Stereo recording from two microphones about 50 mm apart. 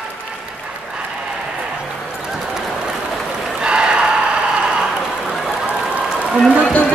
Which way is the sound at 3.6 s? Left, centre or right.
Centre.